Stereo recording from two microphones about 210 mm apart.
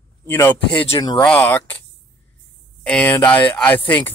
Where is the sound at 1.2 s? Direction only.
10° left (ahead or behind).